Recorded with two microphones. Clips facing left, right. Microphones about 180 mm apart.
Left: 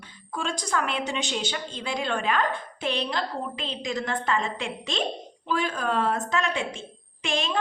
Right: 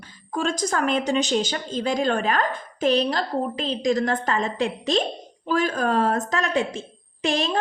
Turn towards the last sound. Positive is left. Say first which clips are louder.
# right 4 dB
turn(degrees=-40)  # may be behind; listen again after turning